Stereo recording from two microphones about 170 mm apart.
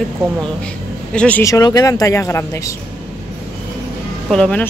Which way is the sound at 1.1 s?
10° left (ahead or behind).